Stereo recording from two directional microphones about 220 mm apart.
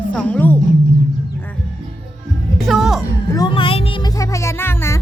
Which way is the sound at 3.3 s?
20° left (ahead or behind).